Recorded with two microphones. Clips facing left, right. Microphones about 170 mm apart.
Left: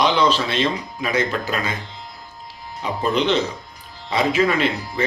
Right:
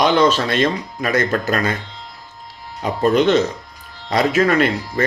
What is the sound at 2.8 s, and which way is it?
Music, 45° right (ahead or behind).